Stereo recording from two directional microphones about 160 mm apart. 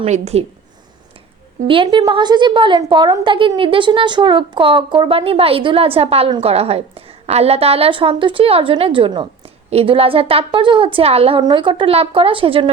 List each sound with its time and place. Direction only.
0.0 s a woman's voice: 40° right (ahead or behind)
1.6 s a woman's voice: 30° right (ahead or behind)